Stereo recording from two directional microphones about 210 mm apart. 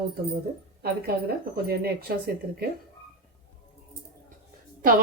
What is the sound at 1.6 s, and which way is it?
Speech, 45° right (ahead or behind).